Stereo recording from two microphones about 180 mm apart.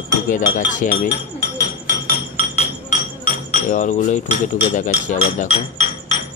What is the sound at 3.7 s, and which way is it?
Speech, 45° left (ahead or behind).